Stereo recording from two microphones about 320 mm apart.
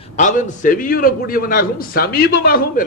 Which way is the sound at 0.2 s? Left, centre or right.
Left.